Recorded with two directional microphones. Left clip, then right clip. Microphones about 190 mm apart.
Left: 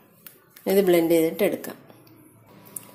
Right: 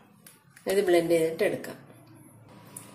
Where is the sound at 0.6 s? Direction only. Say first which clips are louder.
Left 4 dB; 40° left (ahead or behind).